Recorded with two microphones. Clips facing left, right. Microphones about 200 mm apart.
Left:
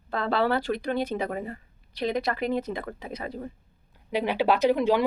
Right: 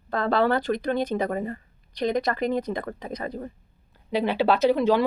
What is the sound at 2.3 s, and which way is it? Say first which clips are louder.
Speech: right 2 dB; 45° right (ahead or behind).